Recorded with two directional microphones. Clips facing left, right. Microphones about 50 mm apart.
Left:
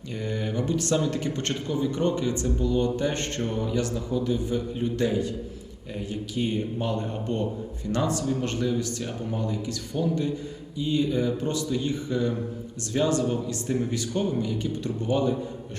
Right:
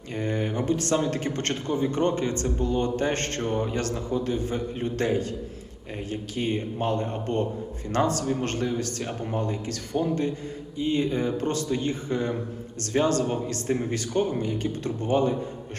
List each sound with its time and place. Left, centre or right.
0.1 s speech: right